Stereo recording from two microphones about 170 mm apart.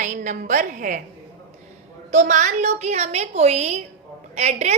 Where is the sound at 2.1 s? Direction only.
45° right (ahead or behind).